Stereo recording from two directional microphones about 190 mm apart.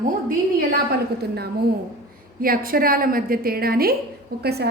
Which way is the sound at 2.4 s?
50° right (ahead or behind).